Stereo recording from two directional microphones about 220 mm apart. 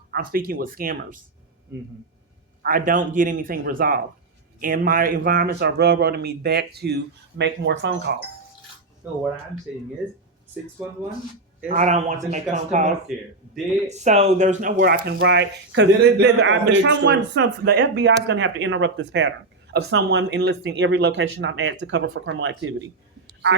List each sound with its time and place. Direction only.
0.1 s speech: 40° right (ahead or behind)
2.6 s a man's voice: 40° right (ahead or behind); by 8.1 s 55° right (ahead or behind)
9.0 s speech: 10° right (ahead or behind)
11.7 s speech: 30° right (ahead or behind)
13.1 s speech: centre (ahead or behind)
13.8 s speech: 30° right (ahead or behind)
15.1 s a man's voice: 60° right (ahead or behind)